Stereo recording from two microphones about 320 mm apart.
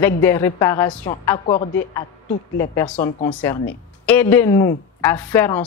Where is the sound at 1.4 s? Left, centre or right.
Left.